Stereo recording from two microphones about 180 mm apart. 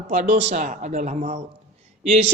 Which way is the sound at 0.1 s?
40° right (ahead or behind).